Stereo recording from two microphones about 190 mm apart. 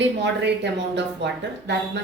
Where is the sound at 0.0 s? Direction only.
65° right (ahead or behind).